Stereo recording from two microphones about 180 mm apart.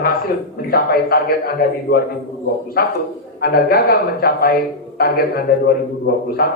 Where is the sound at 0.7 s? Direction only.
55° left (ahead or behind).